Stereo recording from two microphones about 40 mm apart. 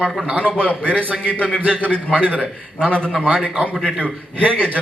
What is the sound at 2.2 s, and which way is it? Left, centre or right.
Speech, right.